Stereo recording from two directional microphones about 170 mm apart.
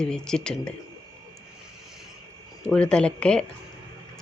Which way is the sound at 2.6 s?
5° left (ahead or behind).